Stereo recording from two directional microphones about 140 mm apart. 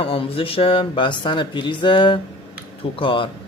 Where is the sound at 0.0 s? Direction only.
40° left (ahead or behind).